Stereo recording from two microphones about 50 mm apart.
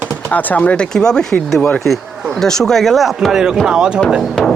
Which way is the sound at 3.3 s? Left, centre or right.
Centre.